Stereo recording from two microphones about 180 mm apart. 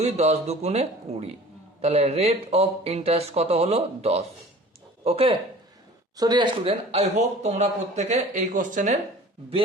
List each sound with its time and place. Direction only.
0.0 s speech: 35° right (ahead or behind)